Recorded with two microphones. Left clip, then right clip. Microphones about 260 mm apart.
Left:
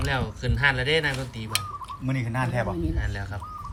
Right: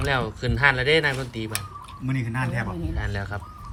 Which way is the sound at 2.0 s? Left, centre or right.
Left.